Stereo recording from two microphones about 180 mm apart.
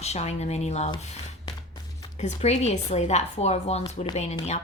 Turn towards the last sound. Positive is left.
turn(degrees=40)  # may be behind; listen again after turning